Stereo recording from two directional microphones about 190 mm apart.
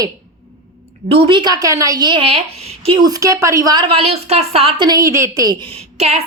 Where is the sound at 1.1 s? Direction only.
25° right (ahead or behind).